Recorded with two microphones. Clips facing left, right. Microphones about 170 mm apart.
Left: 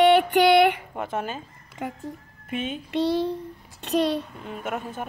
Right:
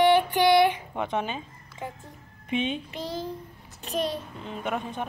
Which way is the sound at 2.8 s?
70° left (ahead or behind).